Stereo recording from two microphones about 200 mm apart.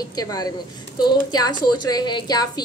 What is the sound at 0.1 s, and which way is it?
A woman's voice, 20° left (ahead or behind).